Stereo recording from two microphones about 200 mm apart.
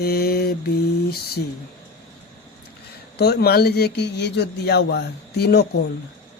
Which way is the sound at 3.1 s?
55° left (ahead or behind).